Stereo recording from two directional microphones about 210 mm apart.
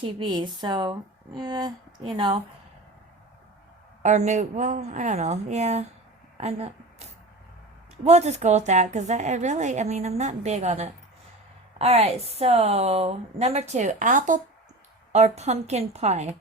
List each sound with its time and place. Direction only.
0.0 s speech: 20° right (ahead or behind)
4.0 s a woman's voice: 35° right (ahead or behind)